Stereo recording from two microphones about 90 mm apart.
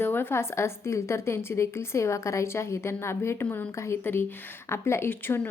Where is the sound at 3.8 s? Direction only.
25° left (ahead or behind).